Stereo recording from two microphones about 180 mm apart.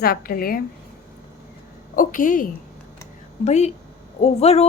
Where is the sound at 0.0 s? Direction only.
55° left (ahead or behind).